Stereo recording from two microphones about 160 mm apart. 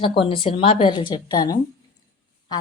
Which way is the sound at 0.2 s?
35° left (ahead or behind).